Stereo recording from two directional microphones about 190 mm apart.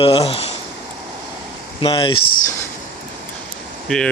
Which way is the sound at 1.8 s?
25° left (ahead or behind).